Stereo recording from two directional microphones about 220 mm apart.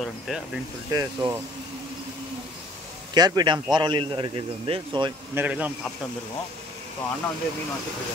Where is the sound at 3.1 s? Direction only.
20° right (ahead or behind).